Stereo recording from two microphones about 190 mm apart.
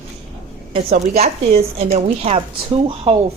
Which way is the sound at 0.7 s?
35° right (ahead or behind).